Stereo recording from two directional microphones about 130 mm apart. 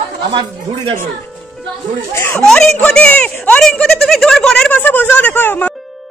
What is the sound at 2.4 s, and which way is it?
Speech, 5° left (ahead or behind).